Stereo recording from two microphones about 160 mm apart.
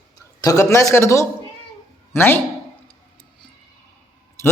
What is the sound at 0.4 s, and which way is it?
Speech, 20° left (ahead or behind).